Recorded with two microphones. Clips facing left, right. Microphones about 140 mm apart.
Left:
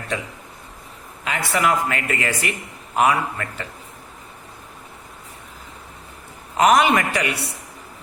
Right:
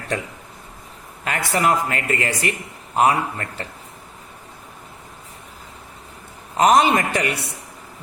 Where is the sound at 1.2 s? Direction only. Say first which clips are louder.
Right 1 dB; 45° right (ahead or behind).